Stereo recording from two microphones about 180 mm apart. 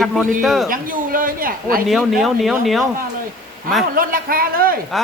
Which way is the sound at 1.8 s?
Centre (ahead or behind).